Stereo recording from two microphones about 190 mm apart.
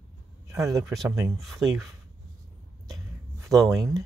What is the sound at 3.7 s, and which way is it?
Speech, 15° right (ahead or behind).